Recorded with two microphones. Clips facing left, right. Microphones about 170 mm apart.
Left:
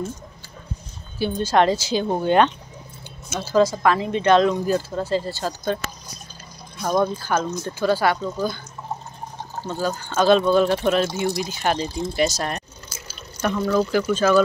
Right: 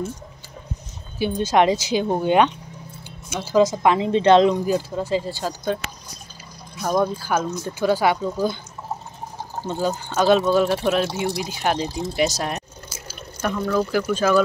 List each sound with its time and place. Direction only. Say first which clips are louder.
1.2 s speech: right 1 dB; 15° right (ahead or behind)
6.8 s speech: even; 5° right (ahead or behind)
9.6 s speech: right 2 dB; 20° right (ahead or behind)
10.1 s speech: left 1 dB; 5° right (ahead or behind)
13.1 s water: left 1 dB; 5° right (ahead or behind)
13.6 s speech: left 1 dB; centre (ahead or behind)
14.1 s speech: left 1 dB; 10° right (ahead or behind)